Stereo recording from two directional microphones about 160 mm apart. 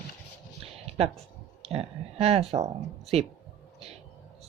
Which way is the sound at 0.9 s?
40° right (ahead or behind).